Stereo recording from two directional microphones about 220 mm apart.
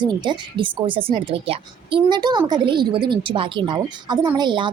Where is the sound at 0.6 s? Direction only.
20° right (ahead or behind).